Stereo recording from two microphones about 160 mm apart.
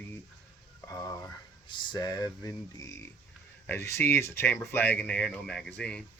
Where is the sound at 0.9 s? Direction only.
20° left (ahead or behind).